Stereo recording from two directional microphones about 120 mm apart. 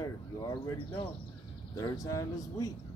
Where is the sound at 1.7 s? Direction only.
30° left (ahead or behind).